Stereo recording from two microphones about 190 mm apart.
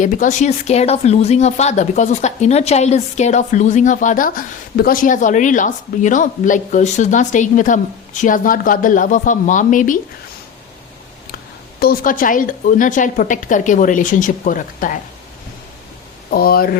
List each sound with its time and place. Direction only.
0.0 s speech: 40° left (ahead or behind)
11.8 s a woman's voice: 50° left (ahead or behind)
16.3 s a woman's voice: 50° left (ahead or behind)